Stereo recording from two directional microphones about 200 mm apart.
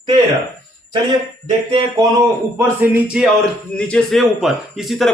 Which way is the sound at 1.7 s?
25° right (ahead or behind).